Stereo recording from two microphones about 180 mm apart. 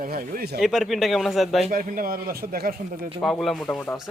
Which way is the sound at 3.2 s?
Centre (ahead or behind).